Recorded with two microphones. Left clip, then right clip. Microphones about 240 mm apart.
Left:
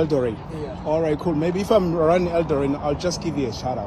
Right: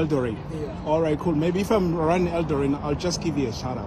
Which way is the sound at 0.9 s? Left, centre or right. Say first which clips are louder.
Left 1 dB; centre.